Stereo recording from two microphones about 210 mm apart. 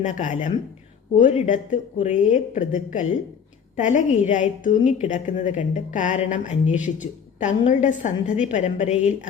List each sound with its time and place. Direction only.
0.0 s a woman's voice: 35° left (ahead or behind)